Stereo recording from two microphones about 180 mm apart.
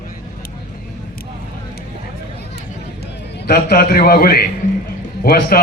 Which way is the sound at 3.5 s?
60° left (ahead or behind).